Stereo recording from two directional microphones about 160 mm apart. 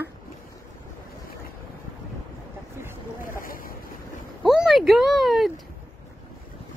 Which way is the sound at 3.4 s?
60° left (ahead or behind).